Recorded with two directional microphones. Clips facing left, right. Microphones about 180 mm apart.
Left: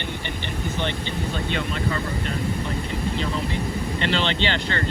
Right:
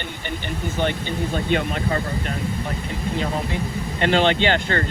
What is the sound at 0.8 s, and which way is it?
Speech, 50° right (ahead or behind).